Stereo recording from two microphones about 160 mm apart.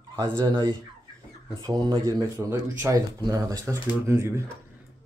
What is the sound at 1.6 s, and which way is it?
Speech, 25° right (ahead or behind).